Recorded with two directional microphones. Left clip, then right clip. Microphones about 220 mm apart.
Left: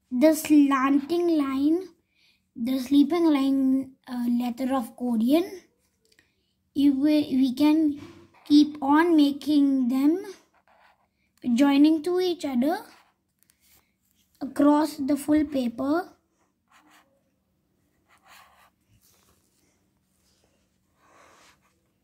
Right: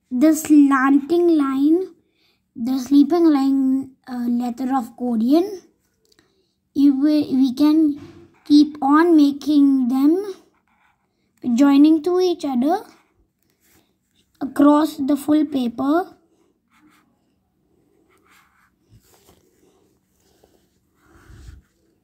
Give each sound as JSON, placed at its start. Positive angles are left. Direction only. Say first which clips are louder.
{"t": 0.2, "sound": "a child's voice", "louder": "right 5 dB", "side_deg": -5}
{"t": 14.4, "sound": "a child's voice", "louder": "right 6 dB", "side_deg": -10}
{"t": 16.7, "sound": "writing", "louder": "right 1 dB", "side_deg": 15}
{"t": 18.0, "sound": "dog", "louder": "left 3 dB", "side_deg": 15}